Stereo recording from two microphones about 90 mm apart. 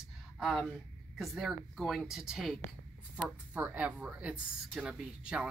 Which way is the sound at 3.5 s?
15° right (ahead or behind).